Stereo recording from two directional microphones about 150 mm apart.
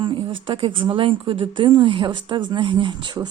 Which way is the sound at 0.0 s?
35° right (ahead or behind).